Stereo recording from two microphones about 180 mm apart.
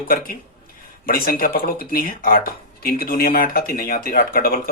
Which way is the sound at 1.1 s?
55° left (ahead or behind).